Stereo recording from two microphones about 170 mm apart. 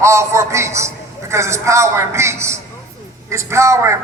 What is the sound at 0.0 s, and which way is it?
A man's voice, 15° right (ahead or behind).